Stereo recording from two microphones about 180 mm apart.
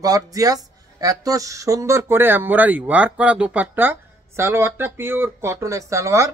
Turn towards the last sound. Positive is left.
turn(degrees=-15)  # may be behind; listen again after turning